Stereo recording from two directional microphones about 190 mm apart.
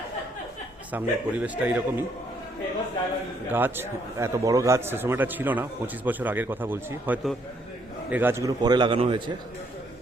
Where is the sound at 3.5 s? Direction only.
10° right (ahead or behind); by 9.3 s 30° right (ahead or behind).